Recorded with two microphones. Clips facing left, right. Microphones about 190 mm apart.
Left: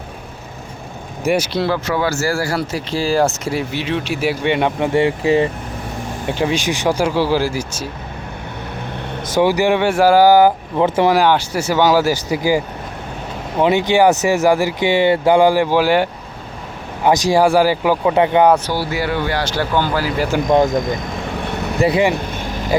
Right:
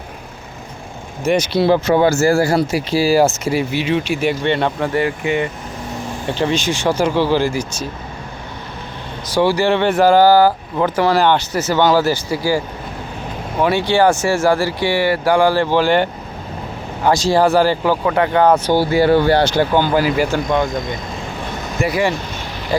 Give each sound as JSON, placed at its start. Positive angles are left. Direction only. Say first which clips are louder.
{"t": 1.2, "sound": "speech", "louder": "right 1 dB", "side_deg": 10}
{"t": 1.5, "sound": "speech", "louder": "right 5 dB", "side_deg": -20}
{"t": 2.7, "sound": "speech", "louder": "right 1 dB", "side_deg": -10}
{"t": 4.9, "sound": "speech", "louder": "left 5 dB", "side_deg": 30}
{"t": 6.2, "sound": "speech", "louder": "even", "side_deg": 10}
{"t": 9.3, "sound": "speech", "louder": "even", "side_deg": 15}
{"t": 11.1, "sound": "speech", "louder": "even", "side_deg": 10}
{"t": 18.7, "sound": "speech", "louder": "right 7 dB", "side_deg": -25}
{"t": 19.5, "sound": "speech", "louder": "right 4 dB", "side_deg": -15}
{"t": 21.4, "sound": "vehicle", "louder": "left 3 dB", "side_deg": 65}
{"t": 21.8, "sound": "speech", "louder": "left 3 dB", "side_deg": 30}
{"t": 22.1, "sound": "vehicle", "louder": "left 3 dB", "side_deg": 50}